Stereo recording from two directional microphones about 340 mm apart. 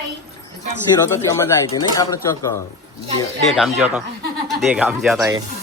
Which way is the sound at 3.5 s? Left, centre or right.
Centre.